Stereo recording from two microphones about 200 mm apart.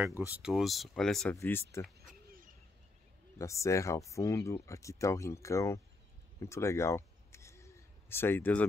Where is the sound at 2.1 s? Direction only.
45° right (ahead or behind).